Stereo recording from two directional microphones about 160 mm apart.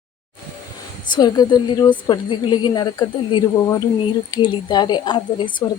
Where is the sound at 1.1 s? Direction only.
25° left (ahead or behind).